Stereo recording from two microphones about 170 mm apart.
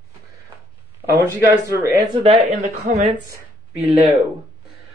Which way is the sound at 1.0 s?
15° right (ahead or behind).